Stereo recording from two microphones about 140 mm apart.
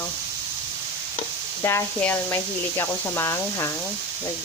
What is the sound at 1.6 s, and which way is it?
Speech, 20° left (ahead or behind).